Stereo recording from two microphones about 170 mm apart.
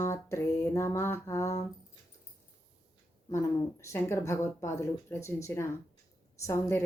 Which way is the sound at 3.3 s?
15° left (ahead or behind).